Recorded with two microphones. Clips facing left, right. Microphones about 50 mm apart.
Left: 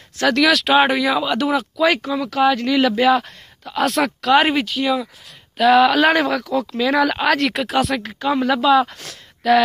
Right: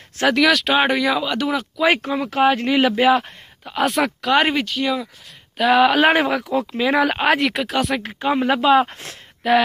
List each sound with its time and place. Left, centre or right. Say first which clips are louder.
0.3 s speech: left 1 dB; centre
1.9 s speech: right 4 dB; right
3.0 s speech: even; centre
5.9 s speech: even; right
7.3 s speech: left 1 dB; centre
8.0 s speech: even; right